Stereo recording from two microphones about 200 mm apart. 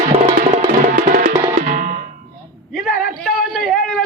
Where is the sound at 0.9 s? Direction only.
50° right (ahead or behind).